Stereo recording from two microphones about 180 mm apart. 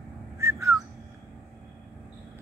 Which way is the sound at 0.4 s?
15° right (ahead or behind).